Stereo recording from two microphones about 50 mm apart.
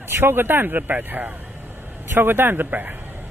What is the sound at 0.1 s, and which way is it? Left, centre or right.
Speech, right.